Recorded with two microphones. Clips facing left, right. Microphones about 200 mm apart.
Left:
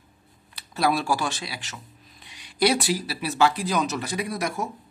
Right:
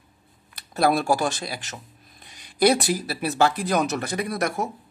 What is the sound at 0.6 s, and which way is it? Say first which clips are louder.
Speech: right 3 dB; 50° right (ahead or behind).